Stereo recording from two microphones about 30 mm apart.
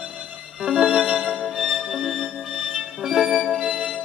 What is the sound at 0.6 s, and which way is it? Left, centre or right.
Music, centre.